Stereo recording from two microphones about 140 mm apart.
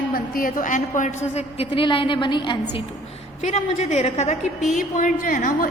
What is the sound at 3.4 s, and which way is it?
Speech, 55° left (ahead or behind).